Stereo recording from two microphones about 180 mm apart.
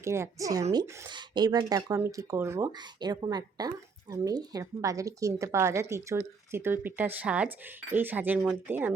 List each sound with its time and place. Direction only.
0.0 s speech: 15° right (ahead or behind)